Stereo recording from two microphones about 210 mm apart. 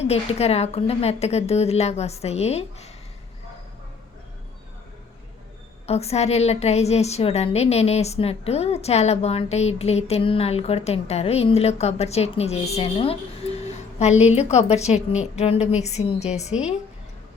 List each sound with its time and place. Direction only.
0.0 s a woman's voice: 30° left (ahead or behind)
5.8 s a woman's voice: 30° left (ahead or behind)